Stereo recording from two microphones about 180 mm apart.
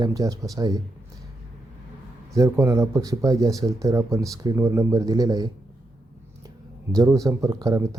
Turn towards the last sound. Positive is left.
turn(degrees=-20)  # may be behind; listen again after turning